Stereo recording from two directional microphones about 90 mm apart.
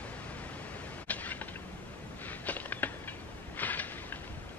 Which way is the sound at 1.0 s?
20° left (ahead or behind).